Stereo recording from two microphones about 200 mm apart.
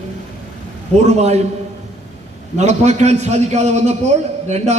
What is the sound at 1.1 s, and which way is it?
Speech, 35° right (ahead or behind).